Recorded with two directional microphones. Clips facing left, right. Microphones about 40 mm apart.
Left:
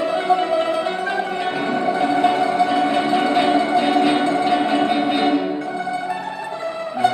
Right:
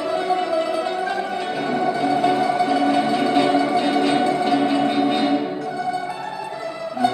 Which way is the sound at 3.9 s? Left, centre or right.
Left.